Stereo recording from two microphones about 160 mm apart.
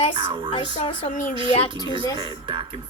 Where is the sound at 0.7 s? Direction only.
45° left (ahead or behind).